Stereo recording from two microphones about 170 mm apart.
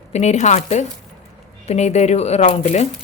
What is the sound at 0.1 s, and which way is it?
Speech, 40° left (ahead or behind).